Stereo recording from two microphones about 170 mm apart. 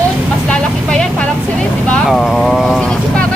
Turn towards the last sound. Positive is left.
turn(degrees=0)  # may be behind; listen again after turning